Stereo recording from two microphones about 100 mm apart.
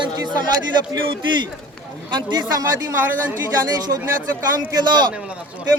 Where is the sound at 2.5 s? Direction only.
35° right (ahead or behind).